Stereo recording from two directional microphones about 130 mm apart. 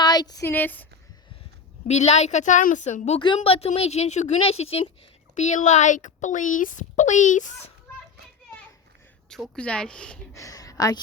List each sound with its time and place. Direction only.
0.0 s a sound: 30° left (ahead or behind)
0.4 s speech: 15° left (ahead or behind)
1.9 s a woman's voice: 60° left (ahead or behind)
3.2 s a woman's voice: 40° left (ahead or behind); by 4.4 s 60° left (ahead or behind)
4.4 s speech: 50° left (ahead or behind)
5.3 s a woman's voice: 70° left (ahead or behind)
9.3 s speech: 5° left (ahead or behind)
10.3 s a sound: 25° left (ahead or behind)